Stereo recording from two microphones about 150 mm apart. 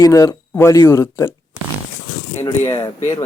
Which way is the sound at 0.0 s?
20° left (ahead or behind).